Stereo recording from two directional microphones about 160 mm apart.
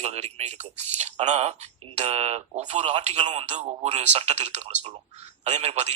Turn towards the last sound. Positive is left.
turn(degrees=-40)  # may be behind; listen again after turning